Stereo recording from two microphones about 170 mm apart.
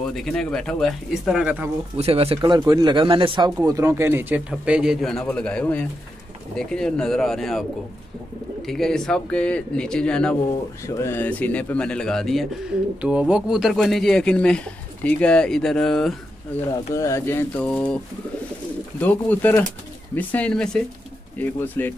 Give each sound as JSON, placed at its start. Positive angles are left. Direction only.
{"t": 0.0, "sound": "speech", "side_deg": 0}
{"t": 2.0, "sound": "speech", "side_deg": -35}
{"t": 8.6, "sound": "speech", "side_deg": 0}
{"t": 10.9, "sound": "speech", "side_deg": 15}
{"t": 16.7, "sound": "speech", "side_deg": 20}
{"t": 18.9, "sound": "speech", "side_deg": 10}